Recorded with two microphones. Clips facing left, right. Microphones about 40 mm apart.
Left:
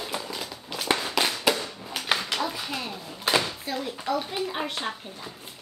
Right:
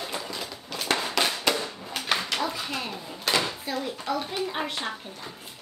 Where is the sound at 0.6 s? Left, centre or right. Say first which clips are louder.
Left 1 dB; centre.